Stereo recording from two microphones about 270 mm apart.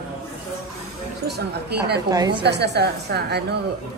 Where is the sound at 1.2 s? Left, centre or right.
Right.